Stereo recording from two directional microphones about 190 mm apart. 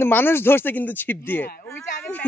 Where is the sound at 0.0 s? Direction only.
10° left (ahead or behind).